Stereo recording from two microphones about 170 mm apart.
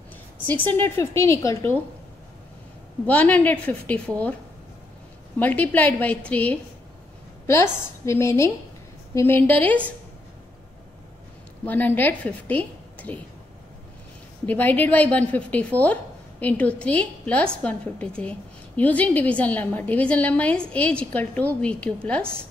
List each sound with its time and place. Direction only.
0.5 s a woman's voice: 10° left (ahead or behind)
3.1 s a woman's voice: 10° left (ahead or behind)
5.4 s a woman's voice: 10° left (ahead or behind)
11.6 s a woman's voice: 10° left (ahead or behind)
14.4 s a woman's voice: 10° left (ahead or behind)